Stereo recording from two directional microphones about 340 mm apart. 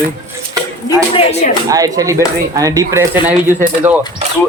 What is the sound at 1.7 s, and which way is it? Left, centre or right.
Speech, centre.